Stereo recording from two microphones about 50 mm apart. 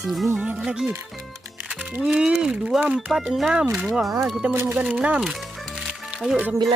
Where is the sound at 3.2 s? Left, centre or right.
Centre.